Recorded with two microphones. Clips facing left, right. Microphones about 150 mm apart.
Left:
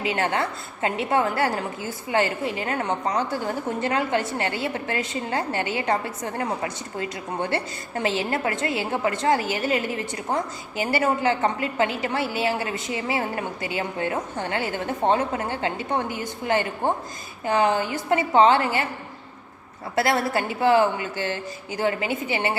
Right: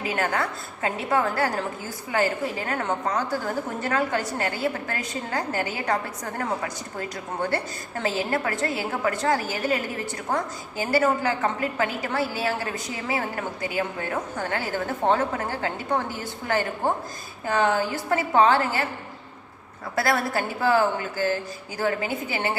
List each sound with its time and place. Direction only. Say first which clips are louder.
0.2 s a woman's voice: left 1 dB; 25° left (ahead or behind)
7.5 s a woman's voice: left 1 dB; 25° left (ahead or behind)
20.0 s a woman's voice: left 2 dB; 25° left (ahead or behind)